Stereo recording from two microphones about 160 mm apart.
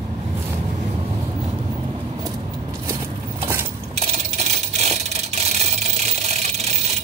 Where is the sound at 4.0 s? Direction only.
40° right (ahead or behind).